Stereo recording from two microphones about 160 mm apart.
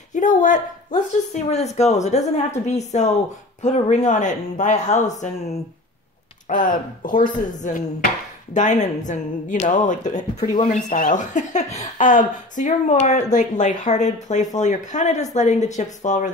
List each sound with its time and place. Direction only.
0.1 s speech: 50° left (ahead or behind)